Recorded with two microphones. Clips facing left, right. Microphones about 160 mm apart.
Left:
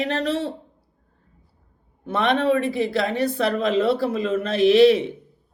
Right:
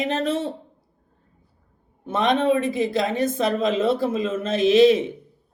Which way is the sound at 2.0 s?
20° right (ahead or behind).